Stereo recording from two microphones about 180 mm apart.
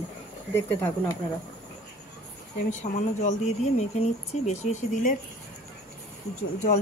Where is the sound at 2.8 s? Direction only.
40° left (ahead or behind).